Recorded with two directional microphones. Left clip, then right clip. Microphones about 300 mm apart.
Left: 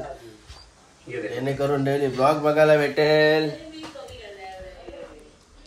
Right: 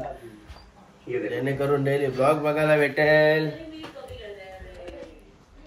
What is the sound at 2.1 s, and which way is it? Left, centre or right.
Speech, centre.